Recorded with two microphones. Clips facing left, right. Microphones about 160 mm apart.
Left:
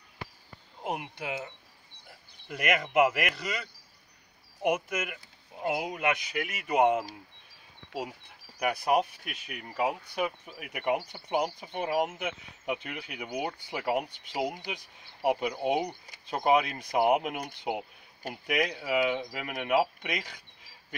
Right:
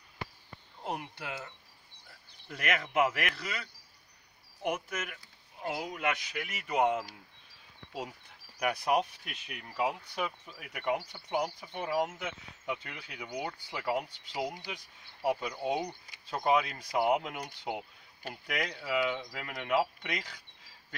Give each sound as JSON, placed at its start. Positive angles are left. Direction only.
{"t": 1.1, "sound": "speech", "side_deg": 15}
{"t": 4.6, "sound": "speech", "side_deg": 15}
{"t": 8.5, "sound": "speech", "side_deg": 5}